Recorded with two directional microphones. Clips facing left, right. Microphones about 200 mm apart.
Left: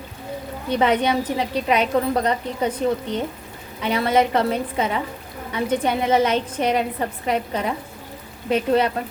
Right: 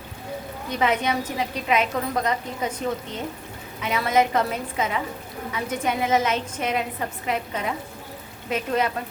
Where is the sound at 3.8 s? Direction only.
30° left (ahead or behind).